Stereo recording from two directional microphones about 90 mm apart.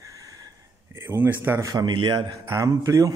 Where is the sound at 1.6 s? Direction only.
45° right (ahead or behind).